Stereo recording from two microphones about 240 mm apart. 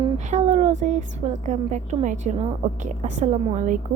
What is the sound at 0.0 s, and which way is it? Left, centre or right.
A woman's voice, right.